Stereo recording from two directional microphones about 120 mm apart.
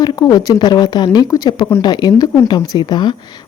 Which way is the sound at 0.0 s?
35° left (ahead or behind).